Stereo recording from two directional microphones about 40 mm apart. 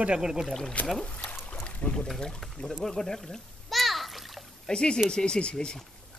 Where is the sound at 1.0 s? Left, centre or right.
Left.